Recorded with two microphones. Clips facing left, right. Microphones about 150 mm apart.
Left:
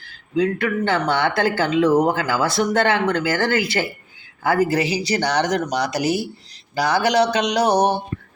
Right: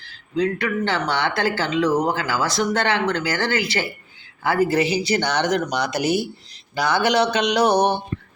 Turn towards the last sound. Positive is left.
turn(degrees=40)  # may be behind; listen again after turning